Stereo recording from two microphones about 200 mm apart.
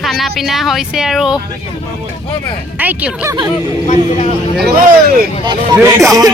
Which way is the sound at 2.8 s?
15° right (ahead or behind).